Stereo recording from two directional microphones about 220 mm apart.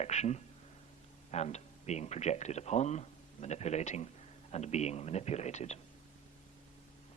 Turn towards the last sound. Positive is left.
turn(degrees=30)  # may be behind; listen again after turning